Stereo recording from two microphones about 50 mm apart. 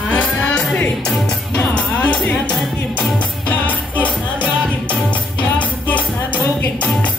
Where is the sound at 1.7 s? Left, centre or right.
Left.